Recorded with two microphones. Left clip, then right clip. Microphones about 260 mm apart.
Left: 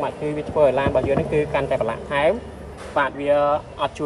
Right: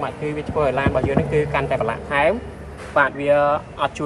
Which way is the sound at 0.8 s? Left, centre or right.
Centre.